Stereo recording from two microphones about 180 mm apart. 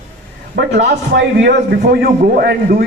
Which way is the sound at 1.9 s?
60° right (ahead or behind).